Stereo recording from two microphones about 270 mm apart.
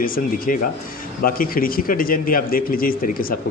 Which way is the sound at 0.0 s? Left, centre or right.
Left.